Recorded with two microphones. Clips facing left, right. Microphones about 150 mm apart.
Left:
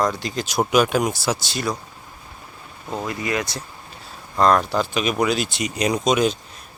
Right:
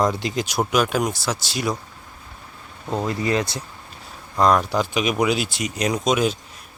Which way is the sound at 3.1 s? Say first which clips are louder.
Right 2 dB; 35° right (ahead or behind).